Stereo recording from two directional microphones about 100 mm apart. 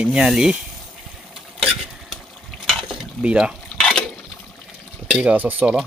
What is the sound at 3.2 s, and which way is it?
Speech, 10° right (ahead or behind).